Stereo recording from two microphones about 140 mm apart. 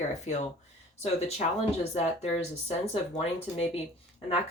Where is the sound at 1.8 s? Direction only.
50° left (ahead or behind).